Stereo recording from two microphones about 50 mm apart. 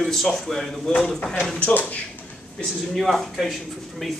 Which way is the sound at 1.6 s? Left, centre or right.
Left.